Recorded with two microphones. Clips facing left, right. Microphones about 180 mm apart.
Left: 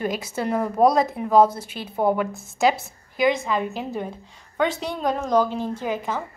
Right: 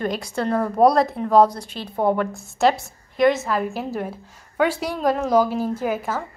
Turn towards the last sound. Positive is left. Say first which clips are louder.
# right 2 dB
turn(degrees=-5)  # may be behind; listen again after turning